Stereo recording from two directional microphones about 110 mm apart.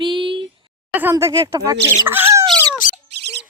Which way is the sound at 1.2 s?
35° right (ahead or behind).